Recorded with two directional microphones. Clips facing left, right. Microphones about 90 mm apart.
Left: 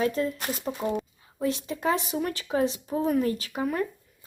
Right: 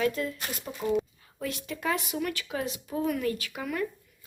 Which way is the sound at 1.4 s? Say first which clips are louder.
Left 5 dB; 25° left (ahead or behind).